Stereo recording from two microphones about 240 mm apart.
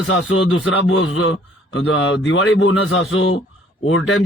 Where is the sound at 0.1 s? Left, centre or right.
Left.